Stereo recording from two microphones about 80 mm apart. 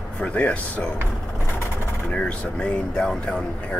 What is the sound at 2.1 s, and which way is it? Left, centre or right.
Speech, centre.